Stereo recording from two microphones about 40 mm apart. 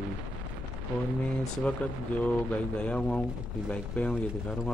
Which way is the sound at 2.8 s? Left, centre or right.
Left.